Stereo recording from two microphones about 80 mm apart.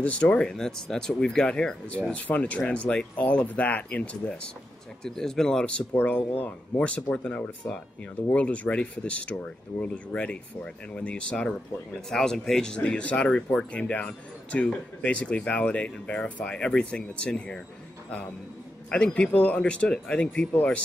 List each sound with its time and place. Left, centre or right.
0.0 s speech: centre
18.9 s speech: centre